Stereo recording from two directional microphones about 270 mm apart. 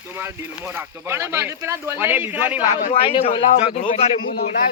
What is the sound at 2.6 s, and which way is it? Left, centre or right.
A man's voice, left.